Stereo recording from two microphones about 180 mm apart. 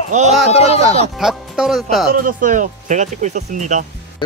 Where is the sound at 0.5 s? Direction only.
35° left (ahead or behind).